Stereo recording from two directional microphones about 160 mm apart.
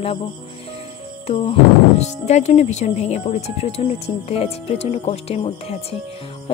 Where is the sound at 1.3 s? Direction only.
40° left (ahead or behind).